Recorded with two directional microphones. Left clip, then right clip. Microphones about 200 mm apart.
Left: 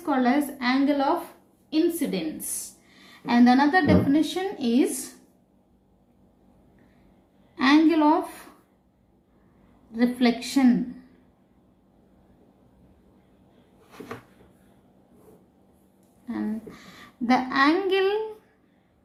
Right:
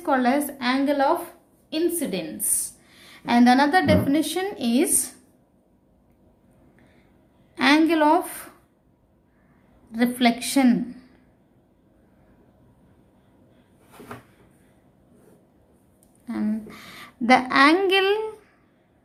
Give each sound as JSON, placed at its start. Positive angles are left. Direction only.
{"t": 0.0, "sound": "a woman's voice", "side_deg": -40}
{"t": 7.5, "sound": "a woman's voice", "side_deg": -50}
{"t": 9.9, "sound": "a woman's voice", "side_deg": -50}
{"t": 16.2, "sound": "a woman's voice", "side_deg": -45}